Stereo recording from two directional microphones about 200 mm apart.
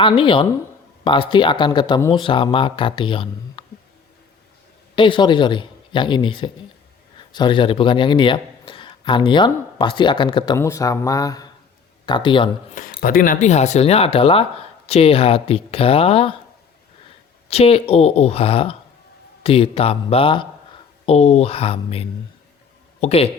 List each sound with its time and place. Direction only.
0.0 s a man's voice: 25° left (ahead or behind)
4.9 s a man's voice: 25° left (ahead or behind)
12.7 s a man's voice: 45° left (ahead or behind); by 16.3 s 30° left (ahead or behind)
17.5 s a man's voice: 30° left (ahead or behind)